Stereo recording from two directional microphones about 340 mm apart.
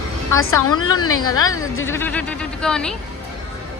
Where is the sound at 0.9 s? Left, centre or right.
Left.